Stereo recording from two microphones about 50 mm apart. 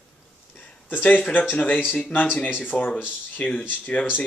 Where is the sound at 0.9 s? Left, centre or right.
Left.